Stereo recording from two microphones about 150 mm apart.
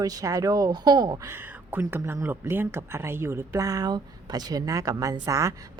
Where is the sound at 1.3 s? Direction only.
15° right (ahead or behind).